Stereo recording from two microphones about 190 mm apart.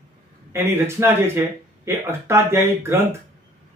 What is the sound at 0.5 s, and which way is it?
Speech, 15° right (ahead or behind).